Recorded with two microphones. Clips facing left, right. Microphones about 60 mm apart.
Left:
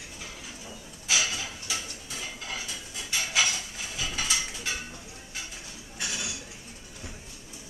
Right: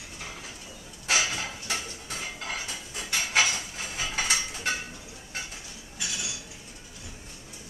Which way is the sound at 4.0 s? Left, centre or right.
Right.